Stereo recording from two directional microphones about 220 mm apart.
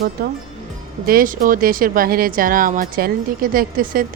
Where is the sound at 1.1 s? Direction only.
40° right (ahead or behind).